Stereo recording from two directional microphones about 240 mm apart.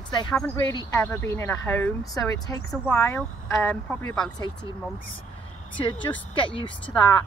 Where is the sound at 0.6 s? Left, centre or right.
Centre.